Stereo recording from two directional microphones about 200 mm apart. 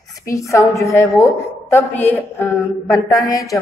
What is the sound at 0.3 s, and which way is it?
A man's voice, 15° left (ahead or behind).